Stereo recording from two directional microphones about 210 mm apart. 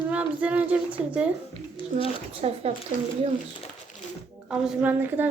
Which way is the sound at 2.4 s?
30° right (ahead or behind).